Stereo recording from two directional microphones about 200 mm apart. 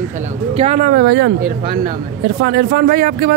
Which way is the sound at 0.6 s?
40° right (ahead or behind).